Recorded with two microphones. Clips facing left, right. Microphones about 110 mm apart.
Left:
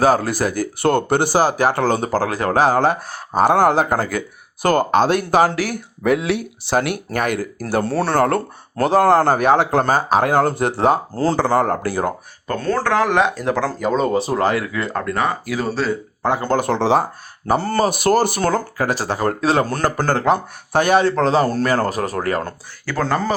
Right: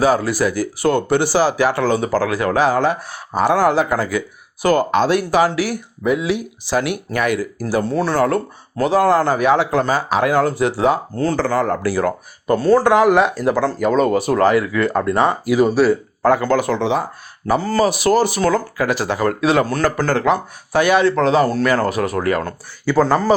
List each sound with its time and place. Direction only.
0.0 s speech: 45° left (ahead or behind)
6.0 s speech: 60° left (ahead or behind); by 7.4 s 45° left (ahead or behind)
7.7 s speech: 60° left (ahead or behind)
11.1 s speech: 30° left (ahead or behind)
11.6 s speech: 40° left (ahead or behind)
12.5 s speech: 10° right (ahead or behind)
14.1 s speech: 25° left (ahead or behind)
14.9 s speech: 25° right (ahead or behind)
16.2 s speech: 25° left (ahead or behind)
16.7 s speech: 35° left (ahead or behind)
17.6 s speech: 55° left (ahead or behind); by 22.4 s 40° left (ahead or behind)
22.9 s speech: 10° right (ahead or behind)